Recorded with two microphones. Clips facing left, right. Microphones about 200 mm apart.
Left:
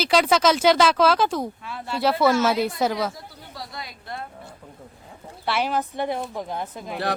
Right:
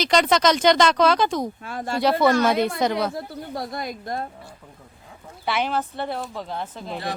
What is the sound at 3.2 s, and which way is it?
Speech, 50° right (ahead or behind).